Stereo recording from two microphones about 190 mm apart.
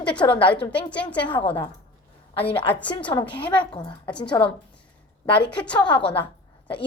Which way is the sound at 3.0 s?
25° left (ahead or behind).